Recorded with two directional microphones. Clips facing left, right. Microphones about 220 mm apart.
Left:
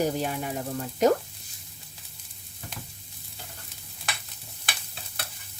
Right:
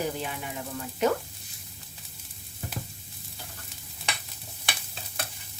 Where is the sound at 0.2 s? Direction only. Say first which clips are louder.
Left 5 dB; 45° left (ahead or behind).